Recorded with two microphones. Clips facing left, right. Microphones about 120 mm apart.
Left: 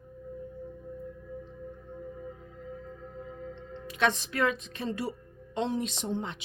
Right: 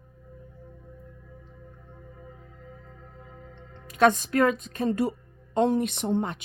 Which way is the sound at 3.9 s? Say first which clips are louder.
Right 8 dB; 45° right (ahead or behind).